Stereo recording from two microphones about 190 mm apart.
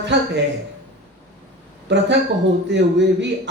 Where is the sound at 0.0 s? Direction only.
65° right (ahead or behind).